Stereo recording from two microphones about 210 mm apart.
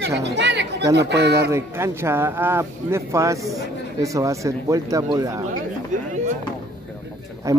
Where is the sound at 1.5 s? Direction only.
10° right (ahead or behind).